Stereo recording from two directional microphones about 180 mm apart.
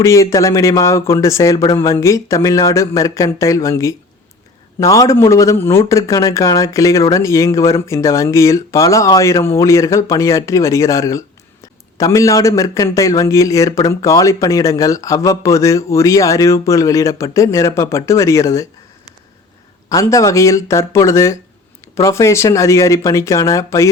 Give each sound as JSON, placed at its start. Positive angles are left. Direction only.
{"t": 0.0, "sound": "speech", "side_deg": 15}
{"t": 19.9, "sound": "speech", "side_deg": 20}